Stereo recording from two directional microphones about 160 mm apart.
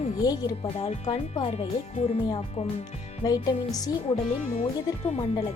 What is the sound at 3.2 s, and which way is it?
Speech, 25° left (ahead or behind).